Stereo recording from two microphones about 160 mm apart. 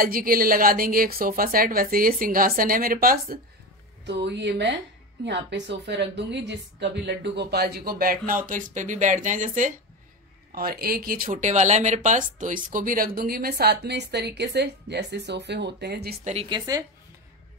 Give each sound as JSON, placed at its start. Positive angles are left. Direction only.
{"t": 0.0, "sound": "a woman's voice", "side_deg": -65}
{"t": 4.0, "sound": "speech", "side_deg": -90}
{"t": 8.5, "sound": "speech", "side_deg": -55}
{"t": 10.5, "sound": "speech", "side_deg": -70}
{"t": 16.4, "sound": "a woman's voice", "side_deg": -25}